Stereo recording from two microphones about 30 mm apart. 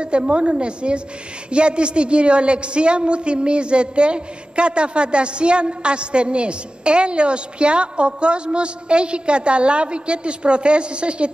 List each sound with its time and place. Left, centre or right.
0.0 s a woman's voice: right